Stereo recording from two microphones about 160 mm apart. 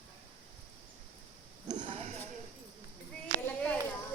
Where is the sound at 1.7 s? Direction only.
30° right (ahead or behind).